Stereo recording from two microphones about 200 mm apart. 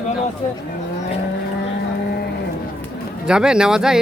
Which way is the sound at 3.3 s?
5° right (ahead or behind).